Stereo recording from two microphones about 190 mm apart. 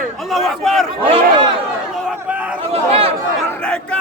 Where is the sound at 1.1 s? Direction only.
25° right (ahead or behind).